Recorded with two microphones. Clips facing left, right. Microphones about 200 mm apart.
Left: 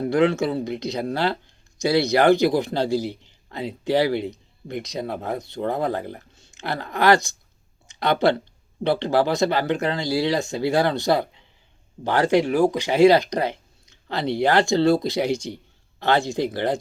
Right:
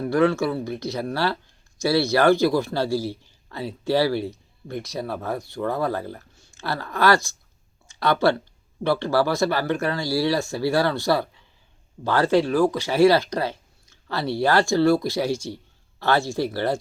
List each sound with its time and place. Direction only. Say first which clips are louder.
0.0 s speech: left 1 dB; 20° left (ahead or behind)